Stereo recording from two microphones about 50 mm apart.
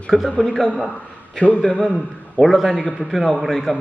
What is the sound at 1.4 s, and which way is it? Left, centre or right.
Speech, left.